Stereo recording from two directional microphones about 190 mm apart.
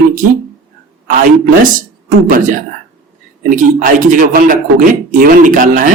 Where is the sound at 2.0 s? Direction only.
45° right (ahead or behind).